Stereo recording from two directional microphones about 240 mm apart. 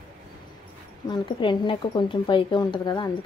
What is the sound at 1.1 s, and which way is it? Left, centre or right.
A woman's voice, centre.